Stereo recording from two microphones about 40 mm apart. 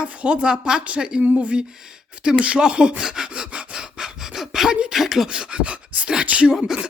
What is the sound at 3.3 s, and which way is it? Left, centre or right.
Gasp, right.